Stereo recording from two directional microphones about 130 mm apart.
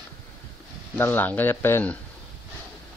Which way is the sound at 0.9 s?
15° left (ahead or behind).